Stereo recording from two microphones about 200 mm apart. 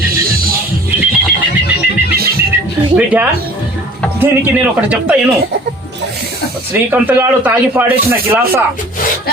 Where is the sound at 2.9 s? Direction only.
5° right (ahead or behind).